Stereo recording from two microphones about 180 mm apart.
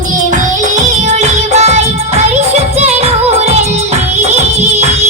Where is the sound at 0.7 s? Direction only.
40° right (ahead or behind).